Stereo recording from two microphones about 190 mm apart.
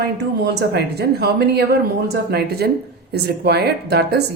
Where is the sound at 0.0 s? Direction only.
60° right (ahead or behind).